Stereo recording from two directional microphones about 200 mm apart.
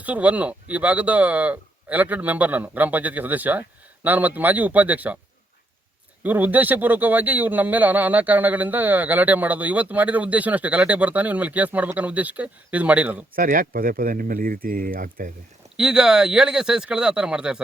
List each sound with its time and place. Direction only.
0.0 s speech: 5° right (ahead or behind)
6.2 s speech: 10° right (ahead or behind)
13.3 s speech: 45° right (ahead or behind)
15.8 s speech: 5° right (ahead or behind)